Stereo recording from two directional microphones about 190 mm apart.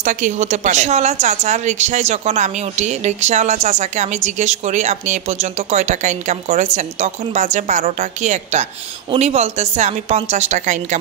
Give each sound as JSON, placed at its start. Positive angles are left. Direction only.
{"t": 0.0, "sound": "a woman's voice", "side_deg": -40}